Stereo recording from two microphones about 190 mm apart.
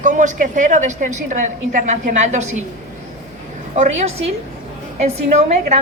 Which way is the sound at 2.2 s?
40° right (ahead or behind).